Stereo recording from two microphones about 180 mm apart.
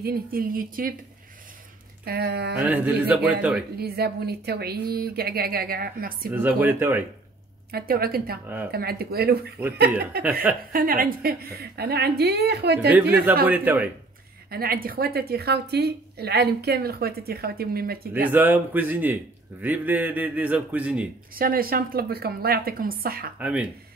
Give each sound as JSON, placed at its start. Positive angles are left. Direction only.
{"t": 0.0, "sound": "speech", "side_deg": -55}
{"t": 2.0, "sound": "a woman's voice", "side_deg": -60}
{"t": 2.5, "sound": "a man's voice", "side_deg": -10}
{"t": 3.7, "sound": "a woman's voice", "side_deg": -60}
{"t": 6.3, "sound": "a man's voice", "side_deg": -10}
{"t": 7.7, "sound": "a woman's voice", "side_deg": -55}
{"t": 10.7, "sound": "a woman's voice", "side_deg": -50}
{"t": 13.1, "sound": "a man's voice", "side_deg": -10}
{"t": 14.5, "sound": "a woman's voice", "side_deg": -55}
{"t": 18.3, "sound": "a man's voice", "side_deg": -10}
{"t": 21.4, "sound": "a woman's voice", "side_deg": -55}
{"t": 23.4, "sound": "a man's voice", "side_deg": -5}